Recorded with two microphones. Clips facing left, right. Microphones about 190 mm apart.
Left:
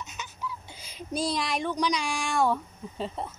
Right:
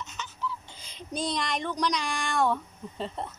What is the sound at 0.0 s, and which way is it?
A woman's voice, 10° left (ahead or behind).